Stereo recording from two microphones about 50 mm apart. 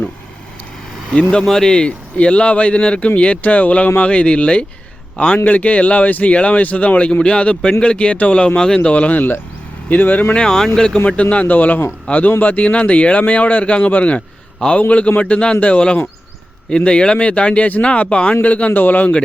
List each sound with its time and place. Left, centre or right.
1.1 s speech: centre
8.9 s speech: left
9.1 s a man's voice: left
10.3 s speech: centre
11.0 s a man's voice: left